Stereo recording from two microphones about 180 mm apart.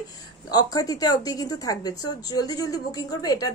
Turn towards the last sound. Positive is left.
turn(degrees=20)  # may be behind; listen again after turning